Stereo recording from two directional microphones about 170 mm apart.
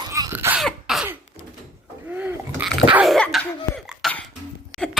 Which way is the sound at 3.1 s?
5° left (ahead or behind).